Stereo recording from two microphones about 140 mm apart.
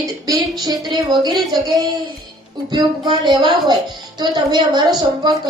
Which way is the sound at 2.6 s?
30° right (ahead or behind).